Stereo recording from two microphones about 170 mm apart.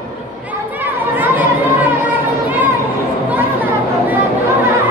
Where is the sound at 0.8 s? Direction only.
10° right (ahead or behind).